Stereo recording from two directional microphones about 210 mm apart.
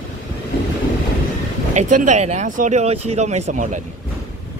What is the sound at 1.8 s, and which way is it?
Speech, 35° right (ahead or behind).